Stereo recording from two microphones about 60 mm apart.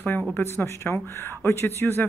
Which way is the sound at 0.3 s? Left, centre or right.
Left.